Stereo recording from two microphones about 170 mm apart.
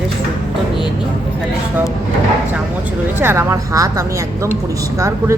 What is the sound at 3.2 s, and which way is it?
A woman's voice, 15° right (ahead or behind).